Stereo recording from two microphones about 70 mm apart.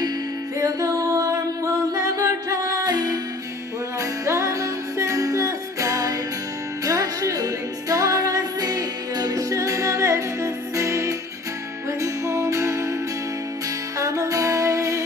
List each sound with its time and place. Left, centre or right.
0.6 s music: right
4.0 s music: right
13.9 s music: right